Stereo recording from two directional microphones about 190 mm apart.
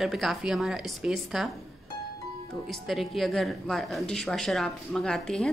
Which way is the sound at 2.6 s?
Centre (ahead or behind).